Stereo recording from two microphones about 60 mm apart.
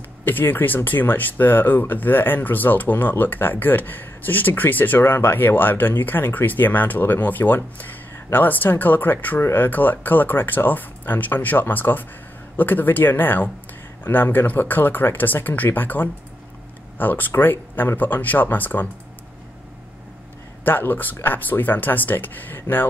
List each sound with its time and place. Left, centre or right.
0.2 s speech: left
20.6 s speech: left